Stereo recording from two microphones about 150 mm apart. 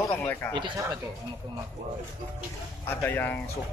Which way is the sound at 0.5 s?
30° right (ahead or behind).